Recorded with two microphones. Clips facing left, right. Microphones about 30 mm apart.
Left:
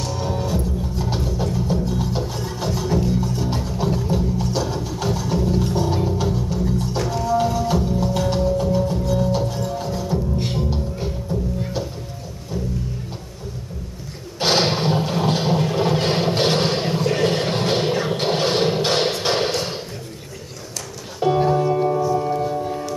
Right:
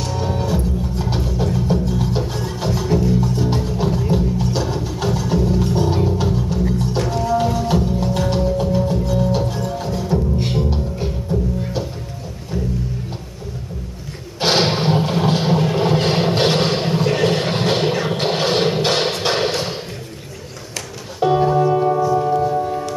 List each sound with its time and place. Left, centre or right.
0.0 s music: centre
14.4 s a sound: centre
21.2 s music: centre